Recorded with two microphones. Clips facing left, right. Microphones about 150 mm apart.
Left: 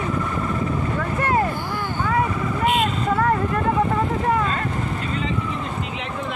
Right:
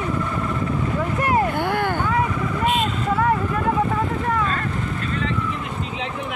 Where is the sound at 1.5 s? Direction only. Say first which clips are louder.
Right 6 dB; 60° right (ahead or behind).